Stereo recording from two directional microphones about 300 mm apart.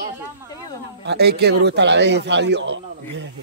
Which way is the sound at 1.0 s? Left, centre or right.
Right.